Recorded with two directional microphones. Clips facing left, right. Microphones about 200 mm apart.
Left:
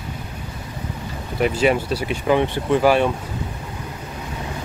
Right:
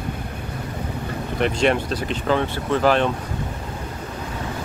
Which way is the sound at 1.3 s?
5° left (ahead or behind).